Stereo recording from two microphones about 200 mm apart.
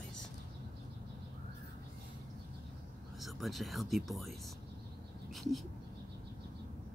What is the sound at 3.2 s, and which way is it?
Speech, centre (ahead or behind).